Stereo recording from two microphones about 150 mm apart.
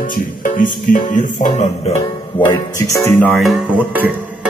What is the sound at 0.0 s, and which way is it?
Music, 65° left (ahead or behind).